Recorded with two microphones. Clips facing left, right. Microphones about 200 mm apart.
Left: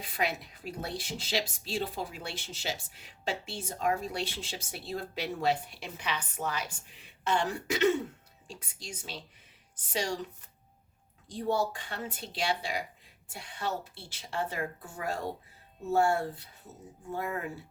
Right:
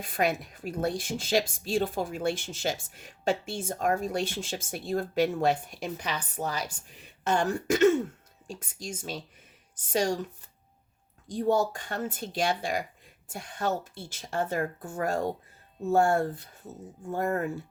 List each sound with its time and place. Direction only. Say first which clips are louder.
0.0 s a woman's voice: right 5 dB; 50° right (ahead or behind)
11.3 s a woman's voice: right 5 dB; 45° right (ahead or behind)